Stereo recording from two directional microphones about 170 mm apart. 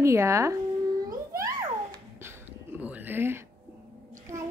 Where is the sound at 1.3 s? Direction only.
20° right (ahead or behind).